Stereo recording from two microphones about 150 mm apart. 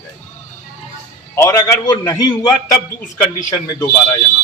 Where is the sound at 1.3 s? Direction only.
20° left (ahead or behind).